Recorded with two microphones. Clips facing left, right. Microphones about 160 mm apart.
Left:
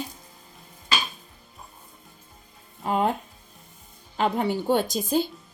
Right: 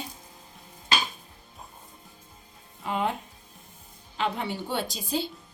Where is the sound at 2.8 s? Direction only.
40° left (ahead or behind).